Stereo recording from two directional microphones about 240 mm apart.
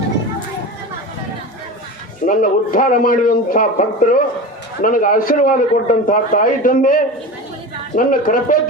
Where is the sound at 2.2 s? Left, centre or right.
Left.